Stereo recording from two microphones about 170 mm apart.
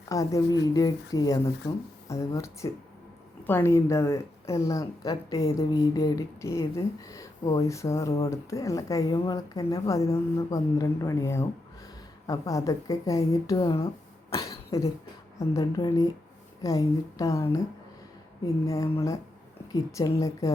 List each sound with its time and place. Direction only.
0.1 s a woman's voice: 20° left (ahead or behind)
18.6 s a woman's voice: 20° left (ahead or behind)